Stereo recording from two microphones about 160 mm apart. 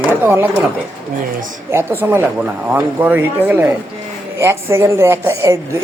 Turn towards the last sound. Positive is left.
turn(degrees=-20)  # may be behind; listen again after turning